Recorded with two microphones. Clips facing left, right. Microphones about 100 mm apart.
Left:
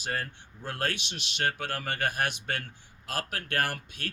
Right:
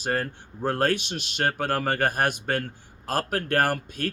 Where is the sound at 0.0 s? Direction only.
40° right (ahead or behind).